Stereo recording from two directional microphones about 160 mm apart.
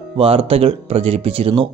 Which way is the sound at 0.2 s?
35° right (ahead or behind).